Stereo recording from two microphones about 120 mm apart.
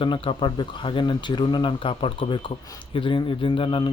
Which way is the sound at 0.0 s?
45° left (ahead or behind).